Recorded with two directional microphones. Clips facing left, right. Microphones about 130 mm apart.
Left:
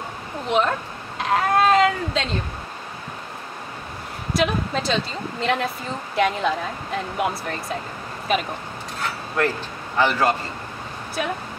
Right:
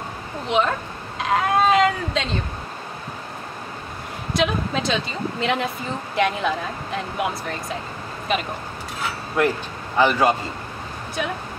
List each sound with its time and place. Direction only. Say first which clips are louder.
0.5 s cat: even; centre (ahead or behind)
4.3 s speech: even; centre (ahead or behind)
9.4 s a man's voice: right 2 dB; 15° right (ahead or behind)